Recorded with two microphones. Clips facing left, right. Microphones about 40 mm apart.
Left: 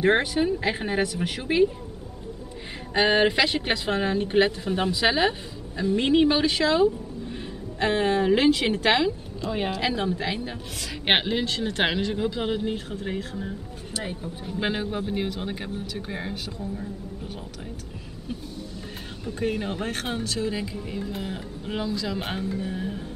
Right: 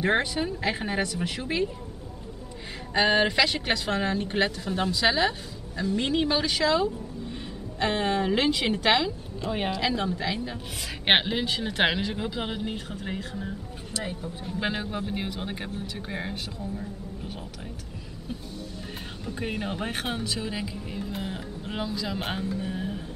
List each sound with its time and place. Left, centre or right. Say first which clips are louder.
0.0 s a woman's voice: left 4 dB; centre
2.9 s a woman's voice: left 2 dB; centre
7.3 s music: left 2 dB; centre
8.5 s speech: left 3 dB; centre
9.7 s a woman's voice: even; centre
11.1 s speech: even; centre
19.4 s speech: left 4 dB; centre